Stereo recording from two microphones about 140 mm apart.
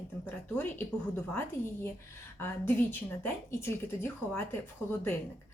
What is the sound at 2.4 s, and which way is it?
A woman's voice, 15° left (ahead or behind).